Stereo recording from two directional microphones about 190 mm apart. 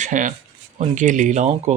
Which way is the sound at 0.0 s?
45° right (ahead or behind).